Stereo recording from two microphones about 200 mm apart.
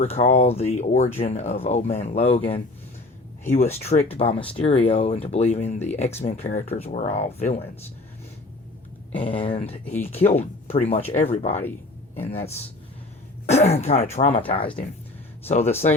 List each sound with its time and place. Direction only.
0.0 s speech: 30° left (ahead or behind)
9.4 s speech: 25° left (ahead or behind)
9.8 s a man's voice: 10° left (ahead or behind)
10.1 s speech: 30° left (ahead or behind)
12.1 s a man's voice: 10° left (ahead or behind)
13.5 s speech: 30° left (ahead or behind)